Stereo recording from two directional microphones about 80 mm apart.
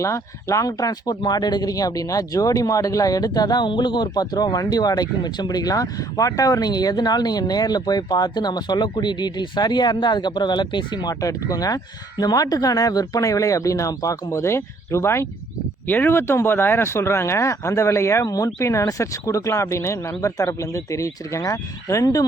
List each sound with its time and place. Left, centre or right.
0.0 s speech: left
11.1 s speech: left